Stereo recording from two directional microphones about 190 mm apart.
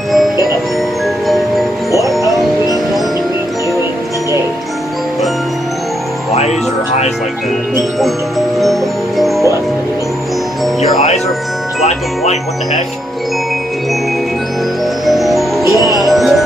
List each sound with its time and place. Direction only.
1.9 s music: 15° right (ahead or behind)
8.5 s music: centre (ahead or behind)
15.0 s music: centre (ahead or behind)